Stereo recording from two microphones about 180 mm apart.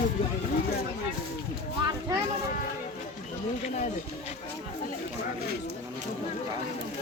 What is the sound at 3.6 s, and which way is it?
Speech, 40° left (ahead or behind).